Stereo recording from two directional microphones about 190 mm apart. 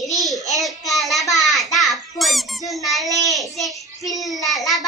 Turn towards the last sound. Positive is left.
turn(degrees=0)  # may be behind; listen again after turning